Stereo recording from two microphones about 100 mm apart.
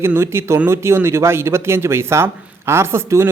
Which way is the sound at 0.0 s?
25° right (ahead or behind).